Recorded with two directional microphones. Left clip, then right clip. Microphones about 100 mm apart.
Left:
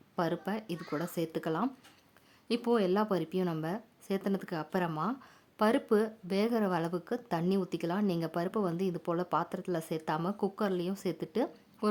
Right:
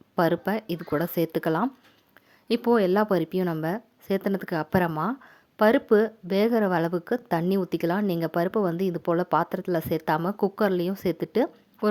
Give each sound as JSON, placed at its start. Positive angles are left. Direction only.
{"t": 0.2, "sound": "speech", "side_deg": -60}
{"t": 2.5, "sound": "a woman's voice", "side_deg": -50}
{"t": 5.2, "sound": "a woman's voice", "side_deg": -45}